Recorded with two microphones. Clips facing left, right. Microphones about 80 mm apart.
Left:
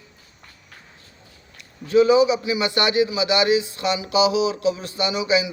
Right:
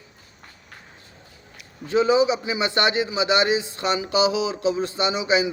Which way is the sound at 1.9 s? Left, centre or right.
Right.